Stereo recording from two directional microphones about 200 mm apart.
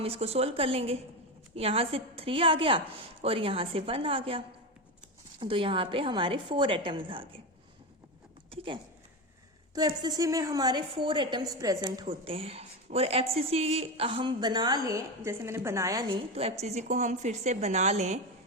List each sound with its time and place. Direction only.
0.0 s a woman's voice: 30° right (ahead or behind)
8.4 s a sound: 25° right (ahead or behind)
9.7 s a woman's voice: 20° right (ahead or behind)